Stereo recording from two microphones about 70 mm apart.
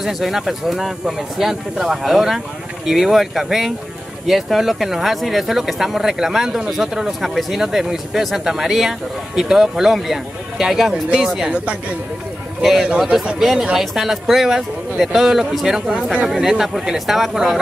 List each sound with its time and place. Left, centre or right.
0.0 s speech: centre
11.4 s speech: centre
12.6 s speech: centre